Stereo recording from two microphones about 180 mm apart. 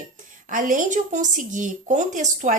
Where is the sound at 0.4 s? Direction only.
50° right (ahead or behind).